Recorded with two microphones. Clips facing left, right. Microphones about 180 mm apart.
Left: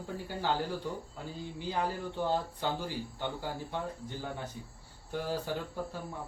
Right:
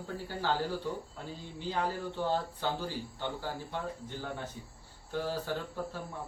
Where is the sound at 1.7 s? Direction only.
15° left (ahead or behind).